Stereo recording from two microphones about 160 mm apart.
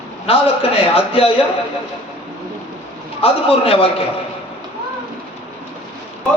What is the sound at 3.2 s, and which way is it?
Speech, 35° left (ahead or behind).